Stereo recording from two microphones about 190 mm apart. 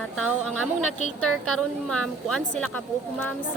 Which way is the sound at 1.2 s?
5° left (ahead or behind).